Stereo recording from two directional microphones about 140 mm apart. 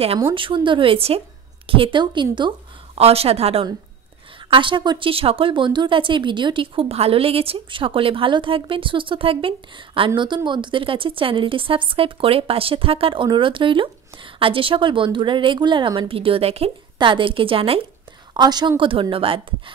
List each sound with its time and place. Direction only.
0.0 s speech: 40° right (ahead or behind)
3.0 s speech: 45° right (ahead or behind)
4.5 s a woman's voice: 35° right (ahead or behind)